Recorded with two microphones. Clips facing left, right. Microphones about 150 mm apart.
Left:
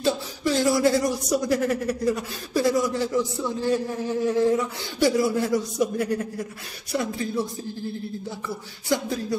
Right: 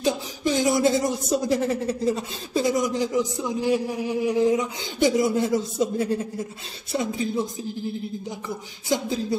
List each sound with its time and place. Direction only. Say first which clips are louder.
0.0 s speech: even; 20° right (ahead or behind)